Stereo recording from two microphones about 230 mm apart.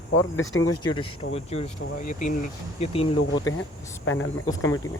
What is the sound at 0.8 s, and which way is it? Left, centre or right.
Speech, left.